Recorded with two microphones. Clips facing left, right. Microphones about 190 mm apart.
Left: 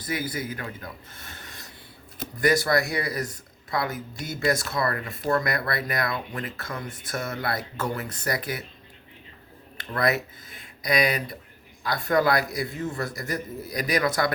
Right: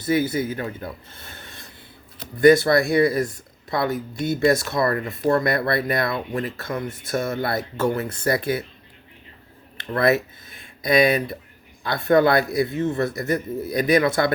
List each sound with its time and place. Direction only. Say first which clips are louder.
0.0 s speech: right 9 dB; 25° right (ahead or behind)
9.7 s speech: right 6 dB; 25° right (ahead or behind)